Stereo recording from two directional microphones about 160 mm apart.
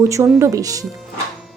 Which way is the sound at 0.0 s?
15° right (ahead or behind).